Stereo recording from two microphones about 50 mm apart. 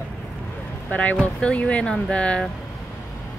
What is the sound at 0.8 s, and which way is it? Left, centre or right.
A woman's voice, left.